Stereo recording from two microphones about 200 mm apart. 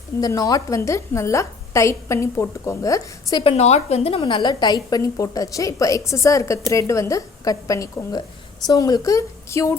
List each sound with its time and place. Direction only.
0.2 s a woman's voice: 20° left (ahead or behind)
3.4 s a woman's voice: 30° left (ahead or behind); by 9.7 s 15° left (ahead or behind)